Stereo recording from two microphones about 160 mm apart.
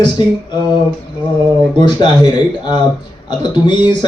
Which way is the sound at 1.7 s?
30° left (ahead or behind).